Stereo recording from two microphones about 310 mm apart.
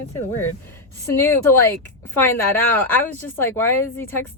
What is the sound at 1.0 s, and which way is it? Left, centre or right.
Speech, centre.